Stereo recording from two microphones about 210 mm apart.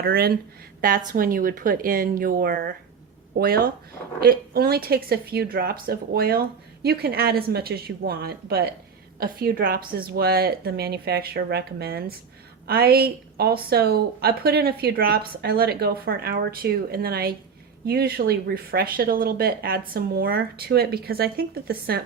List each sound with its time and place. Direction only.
0.0 s a woman's voice: 45° right (ahead or behind)